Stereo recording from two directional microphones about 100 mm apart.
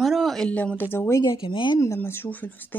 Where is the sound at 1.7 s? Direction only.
30° left (ahead or behind).